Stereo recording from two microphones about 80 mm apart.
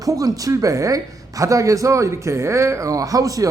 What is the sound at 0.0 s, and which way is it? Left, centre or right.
Speech, right.